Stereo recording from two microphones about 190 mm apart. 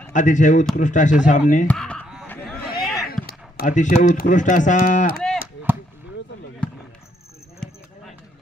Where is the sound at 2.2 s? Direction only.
10° left (ahead or behind).